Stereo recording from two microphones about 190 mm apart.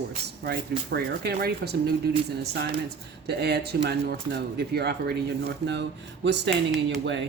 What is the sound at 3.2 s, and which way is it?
Speech, 60° right (ahead or behind).